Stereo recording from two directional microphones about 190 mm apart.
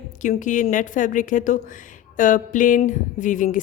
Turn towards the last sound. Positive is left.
turn(degrees=45)  # may be behind; listen again after turning